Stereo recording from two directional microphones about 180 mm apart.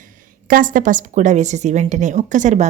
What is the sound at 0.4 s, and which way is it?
Speech, 50° right (ahead or behind).